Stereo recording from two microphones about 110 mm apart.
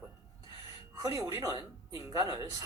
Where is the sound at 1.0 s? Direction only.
35° right (ahead or behind).